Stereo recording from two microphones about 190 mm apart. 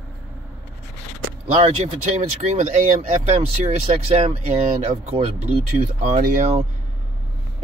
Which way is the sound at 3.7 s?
35° right (ahead or behind).